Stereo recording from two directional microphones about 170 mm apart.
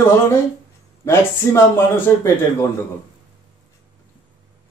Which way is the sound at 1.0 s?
15° left (ahead or behind).